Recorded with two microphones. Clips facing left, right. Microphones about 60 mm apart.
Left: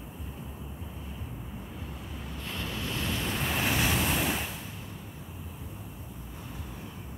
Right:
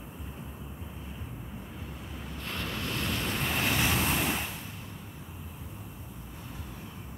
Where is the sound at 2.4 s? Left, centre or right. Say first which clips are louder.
Right 1 dB; right.